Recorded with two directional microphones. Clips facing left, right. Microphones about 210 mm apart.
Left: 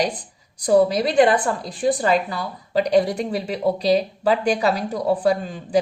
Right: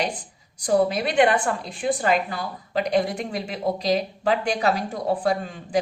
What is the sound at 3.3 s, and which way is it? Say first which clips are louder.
Speech: left 4 dB; 35° left (ahead or behind).